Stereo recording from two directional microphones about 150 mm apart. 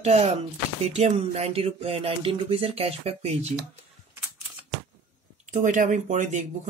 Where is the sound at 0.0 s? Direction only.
45° right (ahead or behind).